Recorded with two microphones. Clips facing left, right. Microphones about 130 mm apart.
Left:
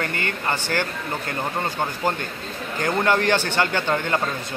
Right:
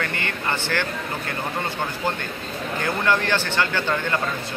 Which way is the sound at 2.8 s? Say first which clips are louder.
Left 3 dB; 45° left (ahead or behind).